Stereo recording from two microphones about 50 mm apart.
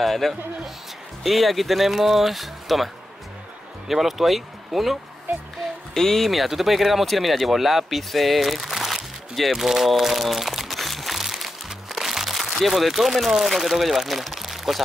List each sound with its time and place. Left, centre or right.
0.0 s speech: centre
5.9 s speech: centre